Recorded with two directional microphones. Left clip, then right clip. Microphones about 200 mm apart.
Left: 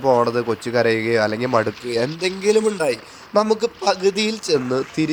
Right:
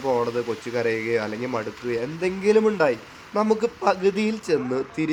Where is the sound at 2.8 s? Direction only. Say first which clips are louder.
Even; centre (ahead or behind).